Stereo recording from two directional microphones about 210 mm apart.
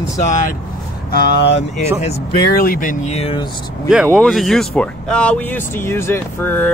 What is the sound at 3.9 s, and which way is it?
Speech, 10° right (ahead or behind).